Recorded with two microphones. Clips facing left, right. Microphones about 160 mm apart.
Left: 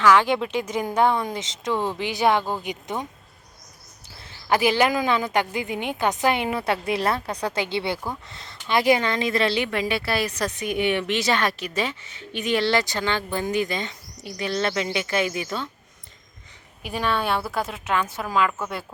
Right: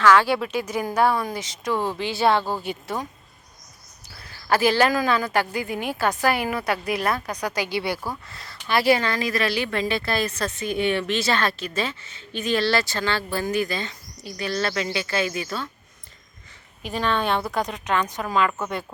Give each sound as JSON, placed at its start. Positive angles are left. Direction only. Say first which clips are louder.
{"t": 0.0, "sound": "a woman's voice", "louder": "even", "side_deg": 15}
{"t": 4.2, "sound": "speech", "louder": "right 1 dB", "side_deg": 20}
{"t": 9.6, "sound": "a woman's voice", "louder": "even", "side_deg": 10}
{"t": 16.8, "sound": "speech", "louder": "right 1 dB", "side_deg": 10}